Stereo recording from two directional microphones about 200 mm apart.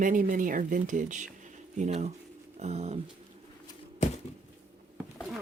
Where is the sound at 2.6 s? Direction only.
35° right (ahead or behind).